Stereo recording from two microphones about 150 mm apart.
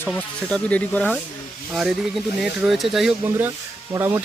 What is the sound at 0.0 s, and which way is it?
Speech, 10° left (ahead or behind).